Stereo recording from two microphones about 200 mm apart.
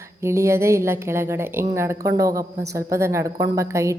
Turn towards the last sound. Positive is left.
turn(degrees=-15)  # may be behind; listen again after turning